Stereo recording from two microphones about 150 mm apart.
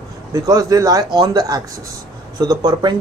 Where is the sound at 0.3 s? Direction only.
25° right (ahead or behind).